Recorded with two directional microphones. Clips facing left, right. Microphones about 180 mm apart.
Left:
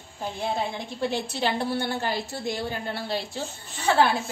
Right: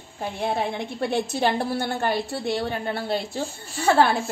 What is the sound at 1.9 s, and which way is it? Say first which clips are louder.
Speech: right 4 dB; 60° right (ahead or behind).